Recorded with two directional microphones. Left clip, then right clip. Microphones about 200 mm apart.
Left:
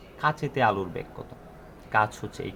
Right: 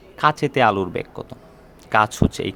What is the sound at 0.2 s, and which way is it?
Speech, 55° right (ahead or behind).